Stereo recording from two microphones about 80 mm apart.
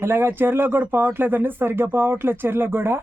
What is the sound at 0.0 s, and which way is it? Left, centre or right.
Speech, right.